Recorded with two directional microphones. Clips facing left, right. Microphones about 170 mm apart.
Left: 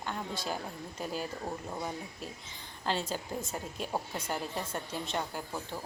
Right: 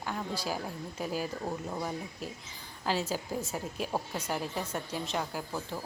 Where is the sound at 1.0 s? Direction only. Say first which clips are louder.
Right 2 dB; 5° right (ahead or behind).